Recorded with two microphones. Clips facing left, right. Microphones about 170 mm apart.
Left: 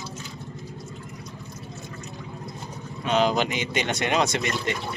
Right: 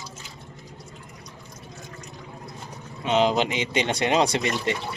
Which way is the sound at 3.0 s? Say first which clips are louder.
Right 1 dB; 25° right (ahead or behind).